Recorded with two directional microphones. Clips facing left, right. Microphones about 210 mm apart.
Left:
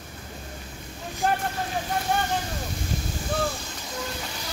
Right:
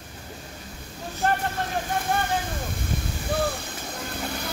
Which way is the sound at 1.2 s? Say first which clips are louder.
Even; centre (ahead or behind).